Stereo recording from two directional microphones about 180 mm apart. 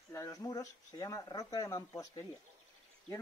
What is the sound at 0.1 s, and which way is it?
Speech, 15° left (ahead or behind).